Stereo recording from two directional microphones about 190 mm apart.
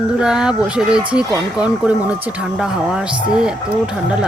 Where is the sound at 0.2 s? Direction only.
5° right (ahead or behind).